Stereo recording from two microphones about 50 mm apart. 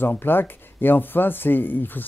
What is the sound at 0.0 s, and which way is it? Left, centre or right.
Speech, left.